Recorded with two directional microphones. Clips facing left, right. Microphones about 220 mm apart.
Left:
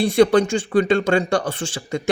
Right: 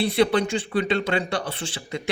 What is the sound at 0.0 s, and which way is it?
Speech, 45° left (ahead or behind).